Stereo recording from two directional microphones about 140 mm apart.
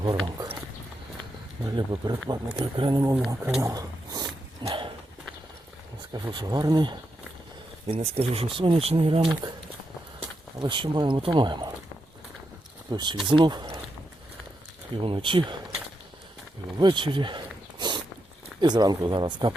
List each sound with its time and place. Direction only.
0.0 s speech: 25° right (ahead or behind)
1.6 s speech: 30° right (ahead or behind)
3.6 s wild animals: 25° right (ahead or behind)
4.6 s dog: 35° right (ahead or behind)
6.3 s speech: 30° right (ahead or behind)
7.9 s speech: 50° right (ahead or behind)
10.6 s speech: 35° right (ahead or behind)
12.9 s speech: 30° right (ahead or behind)
15.0 s speech: 35° right (ahead or behind)
16.7 s a sound: 35° right (ahead or behind)
18.6 s speech: 30° right (ahead or behind)